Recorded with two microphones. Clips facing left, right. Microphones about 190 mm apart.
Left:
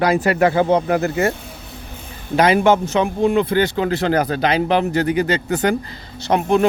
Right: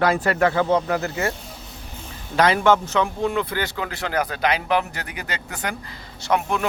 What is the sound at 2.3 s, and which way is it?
Speech, 15° left (ahead or behind).